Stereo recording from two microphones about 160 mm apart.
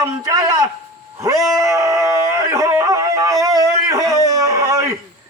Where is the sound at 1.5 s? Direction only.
20° right (ahead or behind).